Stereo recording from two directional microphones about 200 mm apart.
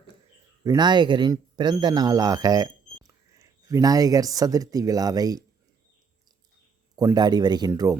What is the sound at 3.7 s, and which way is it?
Speech, 20° right (ahead or behind).